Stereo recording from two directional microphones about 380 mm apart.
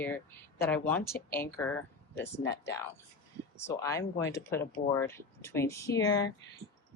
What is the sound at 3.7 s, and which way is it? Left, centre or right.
Speech, centre.